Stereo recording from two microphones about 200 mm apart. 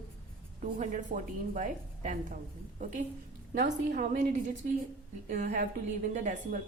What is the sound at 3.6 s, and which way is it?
A woman's voice, 45° right (ahead or behind).